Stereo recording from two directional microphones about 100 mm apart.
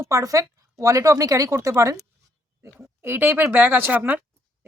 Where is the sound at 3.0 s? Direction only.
25° right (ahead or behind).